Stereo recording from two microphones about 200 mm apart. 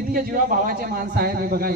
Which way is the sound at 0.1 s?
45° right (ahead or behind).